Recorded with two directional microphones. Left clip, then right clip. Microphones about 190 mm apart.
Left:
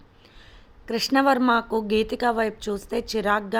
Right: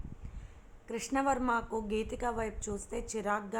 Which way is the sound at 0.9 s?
65° left (ahead or behind).